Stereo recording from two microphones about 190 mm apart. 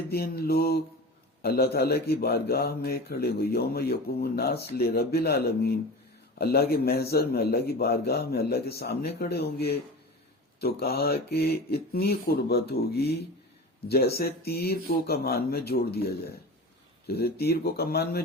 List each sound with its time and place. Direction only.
0.1 s a man's voice: 55° left (ahead or behind)